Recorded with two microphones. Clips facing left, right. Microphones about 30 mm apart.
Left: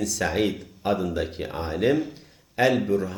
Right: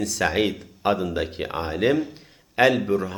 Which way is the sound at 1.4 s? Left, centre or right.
Right.